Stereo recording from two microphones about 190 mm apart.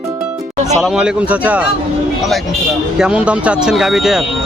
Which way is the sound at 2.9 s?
5° right (ahead or behind).